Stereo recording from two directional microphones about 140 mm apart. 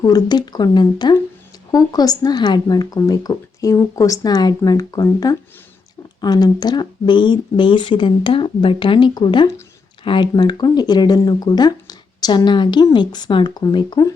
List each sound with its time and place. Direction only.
0.0 s speech: 25° left (ahead or behind)